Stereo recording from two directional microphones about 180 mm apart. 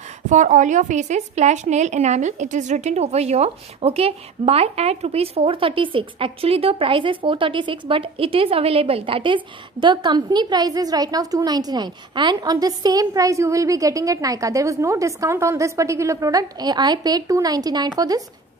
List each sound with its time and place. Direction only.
0.3 s a woman's voice: 45° right (ahead or behind); by 18.2 s 20° right (ahead or behind)